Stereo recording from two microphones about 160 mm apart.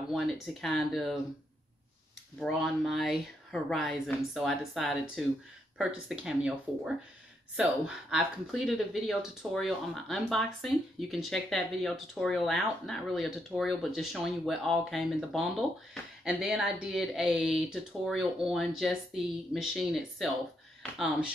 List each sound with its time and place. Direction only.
0.1 s speech: centre (ahead or behind)
2.4 s speech: centre (ahead or behind)